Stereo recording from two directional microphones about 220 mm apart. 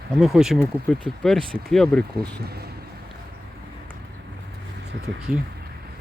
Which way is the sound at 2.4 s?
45° right (ahead or behind).